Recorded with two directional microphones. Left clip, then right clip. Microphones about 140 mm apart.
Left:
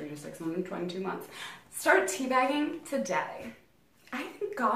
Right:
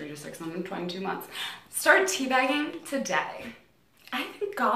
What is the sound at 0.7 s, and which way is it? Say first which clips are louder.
Speech: right 2 dB; 20° left (ahead or behind).